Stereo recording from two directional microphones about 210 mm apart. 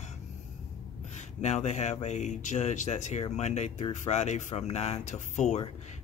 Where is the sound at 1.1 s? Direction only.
35° left (ahead or behind).